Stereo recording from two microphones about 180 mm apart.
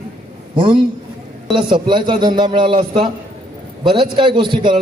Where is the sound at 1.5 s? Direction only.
25° right (ahead or behind).